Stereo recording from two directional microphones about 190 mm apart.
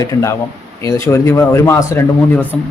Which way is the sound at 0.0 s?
15° left (ahead or behind).